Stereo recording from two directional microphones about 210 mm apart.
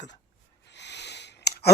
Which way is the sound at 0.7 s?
55° left (ahead or behind).